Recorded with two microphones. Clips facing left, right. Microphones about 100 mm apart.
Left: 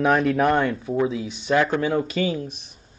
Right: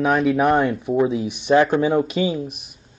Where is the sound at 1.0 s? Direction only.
30° right (ahead or behind).